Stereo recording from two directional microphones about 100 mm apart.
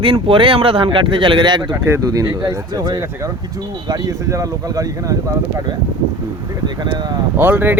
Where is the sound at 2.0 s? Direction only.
35° right (ahead or behind).